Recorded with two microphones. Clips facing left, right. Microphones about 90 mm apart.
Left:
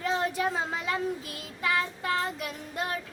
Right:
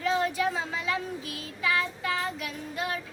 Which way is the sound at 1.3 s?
40° left (ahead or behind).